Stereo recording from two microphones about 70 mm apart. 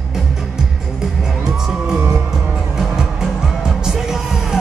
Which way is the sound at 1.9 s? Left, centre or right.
Centre.